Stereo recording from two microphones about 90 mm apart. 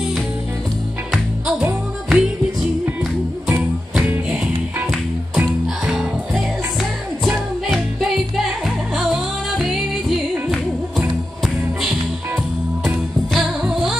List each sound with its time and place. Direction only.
2.0 s music: centre (ahead or behind)
4.0 s music: 15° right (ahead or behind)
5.9 s music: 5° right (ahead or behind)
12.8 s music: 5° right (ahead or behind)